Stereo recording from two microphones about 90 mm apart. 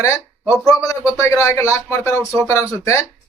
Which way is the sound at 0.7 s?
40° left (ahead or behind).